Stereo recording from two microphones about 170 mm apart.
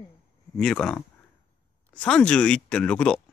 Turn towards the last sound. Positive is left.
turn(degrees=5)  # may be behind; listen again after turning